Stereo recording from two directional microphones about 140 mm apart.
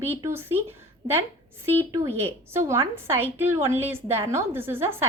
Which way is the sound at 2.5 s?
20° right (ahead or behind).